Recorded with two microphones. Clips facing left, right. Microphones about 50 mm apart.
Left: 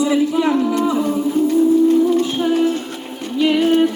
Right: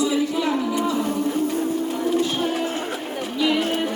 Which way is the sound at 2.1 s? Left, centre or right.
Centre.